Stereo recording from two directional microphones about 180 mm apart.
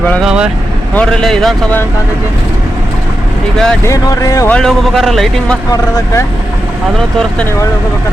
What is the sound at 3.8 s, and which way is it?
Speech, 20° left (ahead or behind).